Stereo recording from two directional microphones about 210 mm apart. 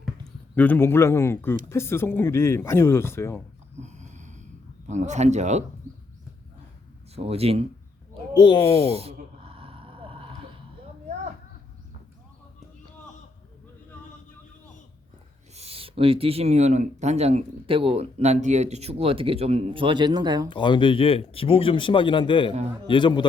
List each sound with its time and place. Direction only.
0.5 s speech: 10° left (ahead or behind)
3.8 s a sound: 35° right (ahead or behind)
4.9 s speech: 35° right (ahead or behind)
7.2 s speech: 30° right (ahead or behind)
8.4 s speech: 20° left (ahead or behind)
8.9 s a sound: 30° right (ahead or behind)
15.5 s speech: 30° right (ahead or behind)
20.5 s speech: 20° left (ahead or behind)